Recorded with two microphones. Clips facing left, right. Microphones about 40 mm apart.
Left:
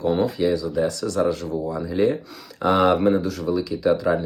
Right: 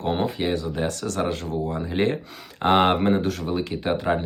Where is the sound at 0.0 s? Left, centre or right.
Right.